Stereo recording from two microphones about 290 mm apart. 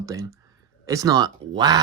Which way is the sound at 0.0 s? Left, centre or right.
Centre.